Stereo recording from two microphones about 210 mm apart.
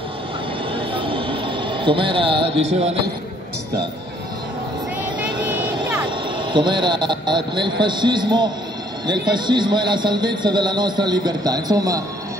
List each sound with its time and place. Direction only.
0.7 s a sound: 25° right (ahead or behind)
2.7 s a man's voice: 30° right (ahead or behind)
6.0 s a man's voice: 20° right (ahead or behind)